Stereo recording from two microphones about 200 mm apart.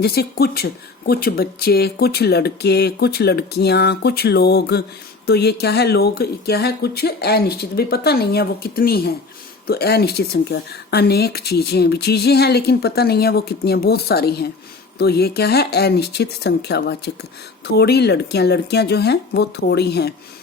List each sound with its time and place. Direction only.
0.0 s speech: 50° left (ahead or behind)